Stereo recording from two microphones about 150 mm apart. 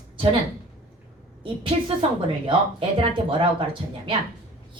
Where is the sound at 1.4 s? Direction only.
35° right (ahead or behind).